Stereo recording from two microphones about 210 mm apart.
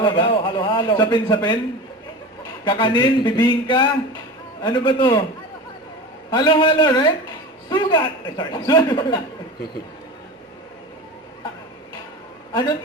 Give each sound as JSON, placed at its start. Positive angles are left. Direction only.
{"t": 0.0, "sound": "a man's voice", "side_deg": 20}
{"t": 2.6, "sound": "a man's voice", "side_deg": 20}
{"t": 6.3, "sound": "a man's voice", "side_deg": 20}